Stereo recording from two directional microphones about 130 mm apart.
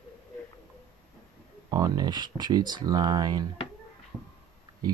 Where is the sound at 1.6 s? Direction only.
30° right (ahead or behind).